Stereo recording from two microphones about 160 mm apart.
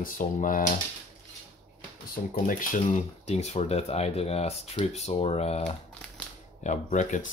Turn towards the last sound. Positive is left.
turn(degrees=50)  # may be behind; listen again after turning